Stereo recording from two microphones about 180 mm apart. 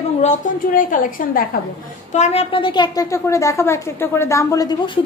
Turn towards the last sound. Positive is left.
turn(degrees=20)  # may be behind; listen again after turning